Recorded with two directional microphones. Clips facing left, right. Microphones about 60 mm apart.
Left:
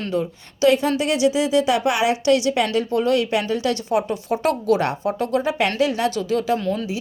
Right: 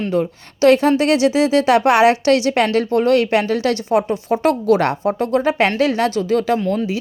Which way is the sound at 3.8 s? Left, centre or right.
Right.